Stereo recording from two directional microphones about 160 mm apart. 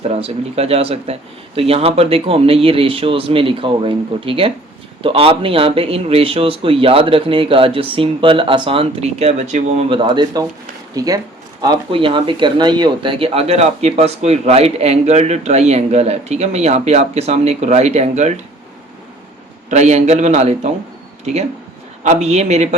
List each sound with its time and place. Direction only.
0.0 s speech: 40° right (ahead or behind)
9.9 s speech: 30° right (ahead or behind); by 18.3 s 45° right (ahead or behind)
19.7 s speech: 45° right (ahead or behind)
22.0 s speech: 45° right (ahead or behind)